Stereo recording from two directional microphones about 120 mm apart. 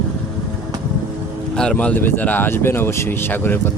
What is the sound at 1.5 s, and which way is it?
Speech, 10° left (ahead or behind).